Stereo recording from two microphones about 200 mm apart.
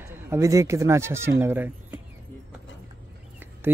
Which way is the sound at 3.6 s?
10° right (ahead or behind).